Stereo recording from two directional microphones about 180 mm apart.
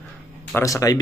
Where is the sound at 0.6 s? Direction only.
20° left (ahead or behind).